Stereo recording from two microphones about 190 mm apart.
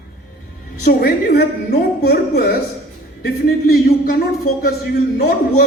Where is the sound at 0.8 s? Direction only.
55° left (ahead or behind).